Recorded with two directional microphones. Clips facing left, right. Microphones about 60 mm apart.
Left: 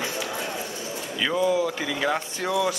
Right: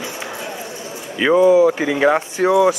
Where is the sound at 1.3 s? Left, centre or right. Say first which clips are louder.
Right 12 dB; right.